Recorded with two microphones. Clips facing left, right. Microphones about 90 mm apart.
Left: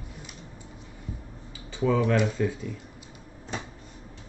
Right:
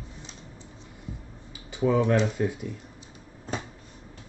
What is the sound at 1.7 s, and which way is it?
Speech, 15° right (ahead or behind).